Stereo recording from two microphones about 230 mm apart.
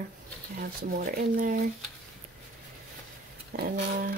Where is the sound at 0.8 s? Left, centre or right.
Right.